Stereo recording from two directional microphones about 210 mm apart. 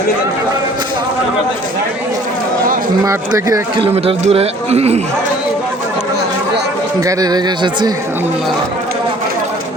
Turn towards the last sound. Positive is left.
turn(degrees=-20)  # may be behind; listen again after turning